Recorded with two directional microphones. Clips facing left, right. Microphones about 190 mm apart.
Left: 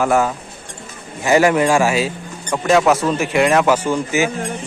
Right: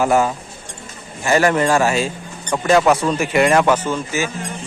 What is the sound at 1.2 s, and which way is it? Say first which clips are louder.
Speech: left 2 dB; 15° left (ahead or behind).